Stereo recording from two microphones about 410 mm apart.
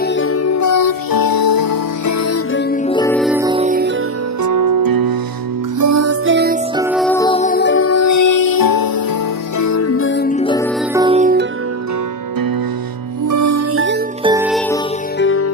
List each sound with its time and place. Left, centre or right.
0.0 s music: left
2.7 s music: centre
4.4 s music: right
5.8 s music: right
6.8 s music: centre; by 8.9 s left
9.6 s music: left; by 10.7 s centre
10.9 s music: centre
13.2 s music: right
14.2 s music: centre
15.1 s music: left